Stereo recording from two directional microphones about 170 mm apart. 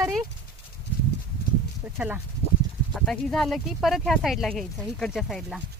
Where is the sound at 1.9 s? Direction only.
10° right (ahead or behind).